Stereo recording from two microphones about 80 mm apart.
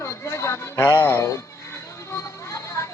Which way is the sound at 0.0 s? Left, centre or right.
Left.